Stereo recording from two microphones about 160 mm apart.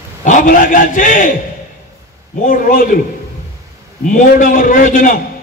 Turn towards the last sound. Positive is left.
turn(degrees=60)  # may be behind; listen again after turning